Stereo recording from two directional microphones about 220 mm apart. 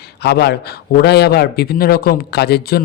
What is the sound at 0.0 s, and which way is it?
Speech, 45° left (ahead or behind).